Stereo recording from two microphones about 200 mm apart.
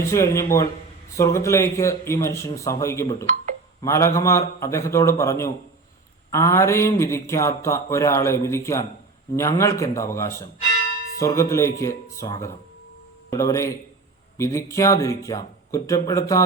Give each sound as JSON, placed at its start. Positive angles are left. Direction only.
{"t": 0.1, "sound": "speech", "side_deg": 15}